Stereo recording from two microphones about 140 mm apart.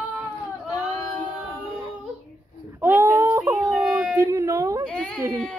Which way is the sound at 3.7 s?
Centre (ahead or behind).